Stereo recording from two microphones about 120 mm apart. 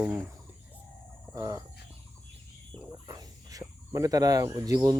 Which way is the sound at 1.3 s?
30° right (ahead or behind).